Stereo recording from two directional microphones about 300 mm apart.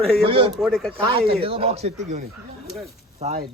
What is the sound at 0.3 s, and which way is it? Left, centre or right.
Speech, centre.